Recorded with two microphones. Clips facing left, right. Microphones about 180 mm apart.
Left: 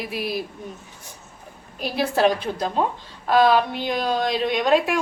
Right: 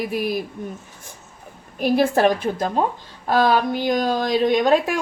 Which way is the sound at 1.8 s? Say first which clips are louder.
Right 4 dB; 50° right (ahead or behind).